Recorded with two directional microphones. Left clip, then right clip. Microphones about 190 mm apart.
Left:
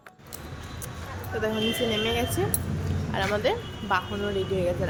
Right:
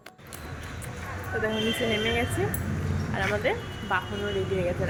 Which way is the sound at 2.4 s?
20° left (ahead or behind).